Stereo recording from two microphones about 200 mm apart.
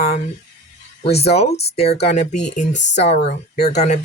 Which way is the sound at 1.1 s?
30° left (ahead or behind).